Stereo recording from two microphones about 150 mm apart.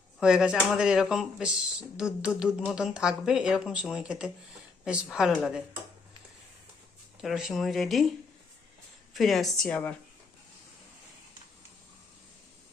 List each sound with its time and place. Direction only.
0.2 s speech: 5° right (ahead or behind)
7.2 s speech: centre (ahead or behind)
9.1 s speech: centre (ahead or behind)